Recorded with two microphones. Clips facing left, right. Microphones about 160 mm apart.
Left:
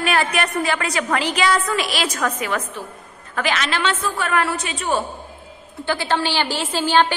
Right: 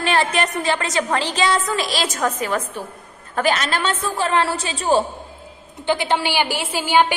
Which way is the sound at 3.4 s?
45° right (ahead or behind).